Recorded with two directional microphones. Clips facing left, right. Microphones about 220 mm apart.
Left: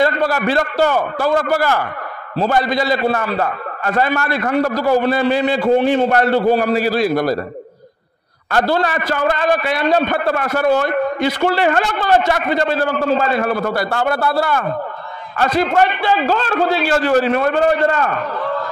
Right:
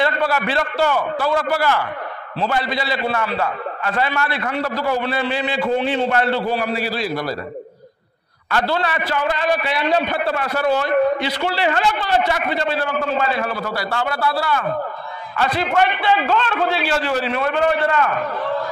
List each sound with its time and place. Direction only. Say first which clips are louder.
0.0 s a man's voice: left 4 dB; 40° left (ahead or behind)
8.5 s a man's voice: left 4 dB; 45° left (ahead or behind)